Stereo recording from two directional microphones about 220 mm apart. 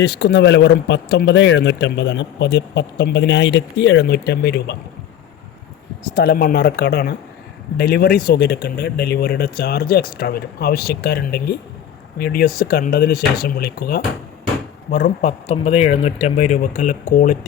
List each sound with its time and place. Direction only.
0.0 s speech: 50° left (ahead or behind)
6.1 s speech: 45° left (ahead or behind)